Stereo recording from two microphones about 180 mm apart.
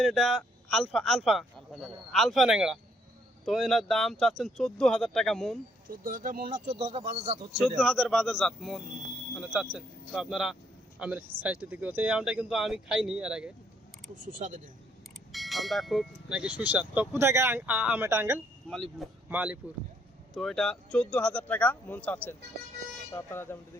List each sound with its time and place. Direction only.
0.0 s a man's voice: centre (ahead or behind)
5.9 s speech: 50° right (ahead or behind)
6.8 s speech: 35° right (ahead or behind)
7.8 s a man's voice: centre (ahead or behind)
14.3 s speech: 45° right (ahead or behind)
15.3 s speech: centre (ahead or behind)
18.7 s a man's voice: centre (ahead or behind)